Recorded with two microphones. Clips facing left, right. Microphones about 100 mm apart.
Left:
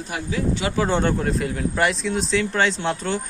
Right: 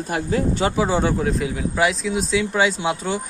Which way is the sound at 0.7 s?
5° right (ahead or behind).